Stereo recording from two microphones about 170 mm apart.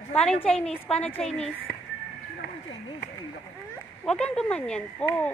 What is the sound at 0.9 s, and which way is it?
Speech, 35° left (ahead or behind).